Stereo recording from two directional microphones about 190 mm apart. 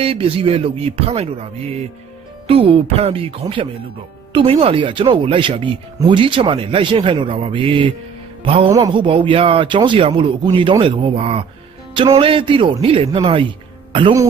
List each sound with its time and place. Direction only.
0.0 s speech: 30° right (ahead or behind)